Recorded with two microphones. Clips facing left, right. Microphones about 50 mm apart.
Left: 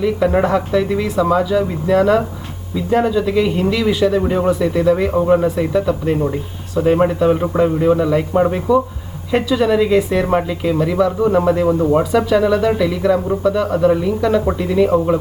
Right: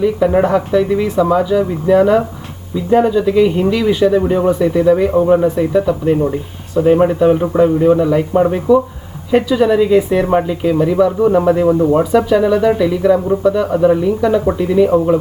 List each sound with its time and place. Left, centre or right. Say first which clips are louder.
0.4 s speech: right 3 dB; centre
4.2 s a man's voice: right 3 dB; centre
4.4 s speech: right 3 dB; centre
6.1 s a man's voice: right 4 dB; centre
8.4 s a man's voice: right 2 dB; centre
9.3 s a man's voice: right 3 dB; centre